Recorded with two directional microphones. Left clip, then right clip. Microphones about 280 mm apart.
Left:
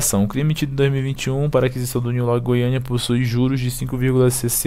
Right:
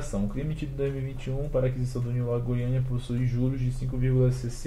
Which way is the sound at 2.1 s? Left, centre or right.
Left.